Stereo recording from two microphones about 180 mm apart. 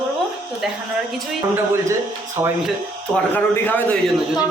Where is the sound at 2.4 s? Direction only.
20° right (ahead or behind).